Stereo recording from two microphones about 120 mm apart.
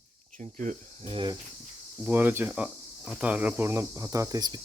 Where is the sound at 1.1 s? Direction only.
40° right (ahead or behind).